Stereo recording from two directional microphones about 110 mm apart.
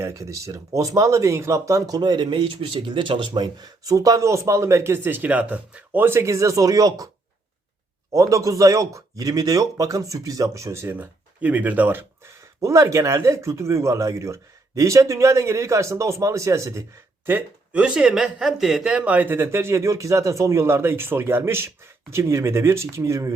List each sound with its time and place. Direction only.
0.0 s speech: 30° right (ahead or behind)
8.1 s speech: 30° right (ahead or behind)
12.5 s speech: 30° right (ahead or behind)
17.2 s speech: 15° right (ahead or behind)